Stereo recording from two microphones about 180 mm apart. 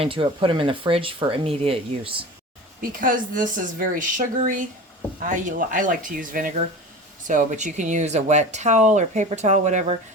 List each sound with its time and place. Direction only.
0.0 s speech: 30° right (ahead or behind)
2.9 s speech: 50° right (ahead or behind)